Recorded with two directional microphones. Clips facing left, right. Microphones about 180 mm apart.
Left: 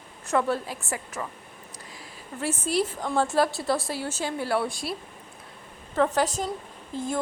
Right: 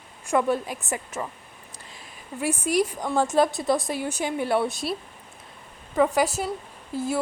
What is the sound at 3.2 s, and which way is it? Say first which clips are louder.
A woman's voice: right 2 dB; 20° right (ahead or behind).